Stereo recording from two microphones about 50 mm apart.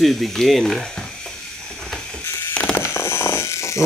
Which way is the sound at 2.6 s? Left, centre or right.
Left.